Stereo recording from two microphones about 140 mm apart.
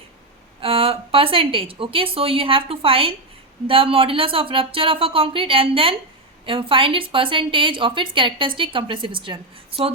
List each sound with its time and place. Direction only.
0.6 s a woman's voice: 40° right (ahead or behind)